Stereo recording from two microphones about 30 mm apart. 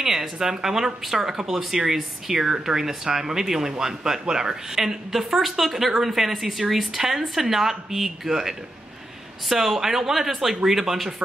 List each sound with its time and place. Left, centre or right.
0.0 s speech: centre
5.1 s speech: centre
9.5 s speech: centre